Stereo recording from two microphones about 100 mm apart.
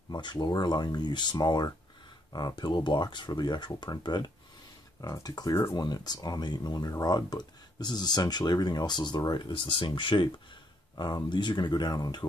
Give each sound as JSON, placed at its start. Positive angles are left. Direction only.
{"t": 0.1, "sound": "speech", "side_deg": 45}
{"t": 5.0, "sound": "speech", "side_deg": 35}
{"t": 9.5, "sound": "speech", "side_deg": 60}